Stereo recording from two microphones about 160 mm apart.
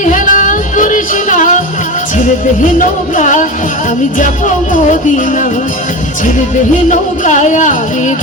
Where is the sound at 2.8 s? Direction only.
55° left (ahead or behind).